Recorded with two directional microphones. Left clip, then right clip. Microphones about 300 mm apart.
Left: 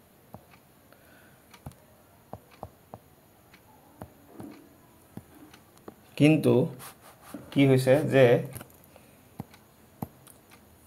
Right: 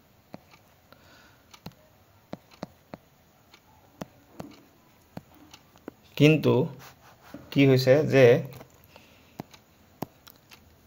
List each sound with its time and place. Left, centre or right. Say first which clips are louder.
6.1 s speech: right 1 dB; right
7.5 s speech: right 2 dB; right